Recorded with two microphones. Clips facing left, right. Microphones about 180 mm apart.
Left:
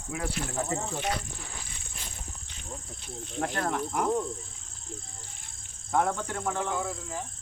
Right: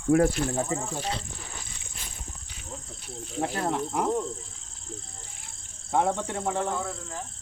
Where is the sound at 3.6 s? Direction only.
30° right (ahead or behind).